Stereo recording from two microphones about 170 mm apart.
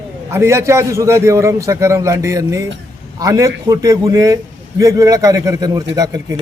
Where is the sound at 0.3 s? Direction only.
15° right (ahead or behind).